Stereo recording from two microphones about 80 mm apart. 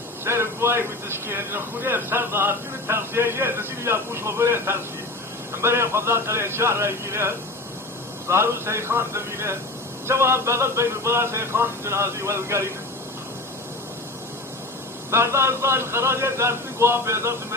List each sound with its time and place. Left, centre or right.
0.3 s speech: right
15.1 s speech: right